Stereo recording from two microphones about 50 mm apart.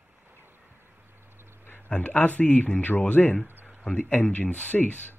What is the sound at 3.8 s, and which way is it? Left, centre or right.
Speech, centre.